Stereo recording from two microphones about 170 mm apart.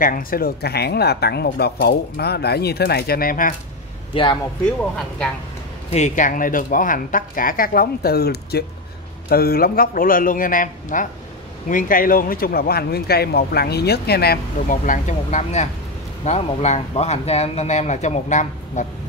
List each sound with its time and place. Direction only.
0.0 s speech: 55° left (ahead or behind)
4.1 s speech: 30° left (ahead or behind)
5.9 s speech: 40° left (ahead or behind)